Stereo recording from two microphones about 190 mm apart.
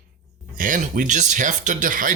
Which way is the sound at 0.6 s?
45° right (ahead or behind).